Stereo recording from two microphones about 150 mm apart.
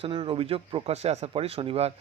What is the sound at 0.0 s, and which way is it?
A man's voice, 35° right (ahead or behind).